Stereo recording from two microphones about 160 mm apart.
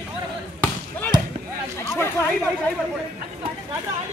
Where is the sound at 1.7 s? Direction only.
15° left (ahead or behind).